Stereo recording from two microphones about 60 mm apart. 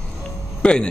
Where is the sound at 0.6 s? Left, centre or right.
Centre.